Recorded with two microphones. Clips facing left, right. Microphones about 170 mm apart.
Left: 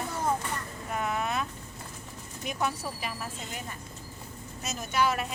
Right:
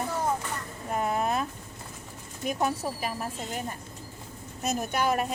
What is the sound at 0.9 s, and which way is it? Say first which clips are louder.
Speech: right 4 dB; 35° right (ahead or behind).